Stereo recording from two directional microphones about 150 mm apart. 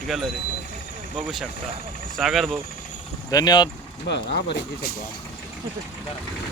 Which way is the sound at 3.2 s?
25° left (ahead or behind).